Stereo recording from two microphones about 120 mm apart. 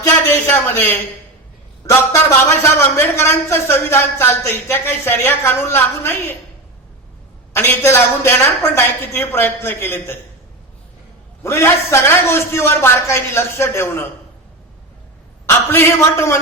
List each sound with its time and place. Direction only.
0.0 s speech: 20° left (ahead or behind)
2.9 s speech: 20° left (ahead or behind)
7.5 s speech: 20° left (ahead or behind)
11.4 s speech: 20° left (ahead or behind)
15.4 s speech: 20° left (ahead or behind)